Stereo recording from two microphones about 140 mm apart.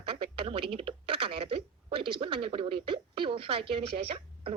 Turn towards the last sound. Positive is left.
turn(degrees=-40)  # may be behind; listen again after turning